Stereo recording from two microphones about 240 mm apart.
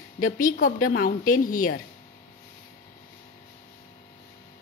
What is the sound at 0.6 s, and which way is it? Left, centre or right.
Speech, left.